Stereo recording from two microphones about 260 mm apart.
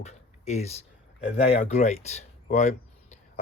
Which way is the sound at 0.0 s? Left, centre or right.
Left.